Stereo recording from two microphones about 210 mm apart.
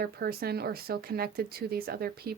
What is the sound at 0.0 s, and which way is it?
Speech, 45° right (ahead or behind).